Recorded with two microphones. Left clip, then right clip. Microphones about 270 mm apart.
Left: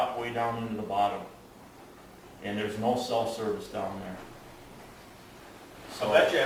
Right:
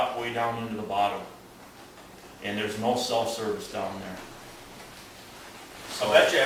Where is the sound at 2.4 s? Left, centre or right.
Centre.